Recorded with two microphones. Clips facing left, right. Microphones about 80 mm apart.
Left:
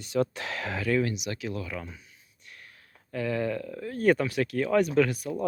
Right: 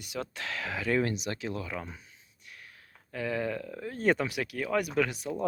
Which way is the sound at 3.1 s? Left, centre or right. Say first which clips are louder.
Left 3 dB; centre.